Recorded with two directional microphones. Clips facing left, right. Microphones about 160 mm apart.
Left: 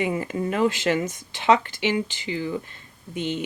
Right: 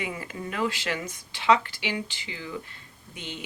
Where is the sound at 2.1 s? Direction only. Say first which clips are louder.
Left 9 dB; 40° left (ahead or behind).